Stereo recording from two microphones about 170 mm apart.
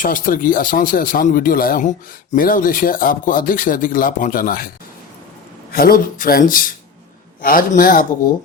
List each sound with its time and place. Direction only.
0.0 s speech: 55° left (ahead or behind)
5.7 s speech: 60° left (ahead or behind)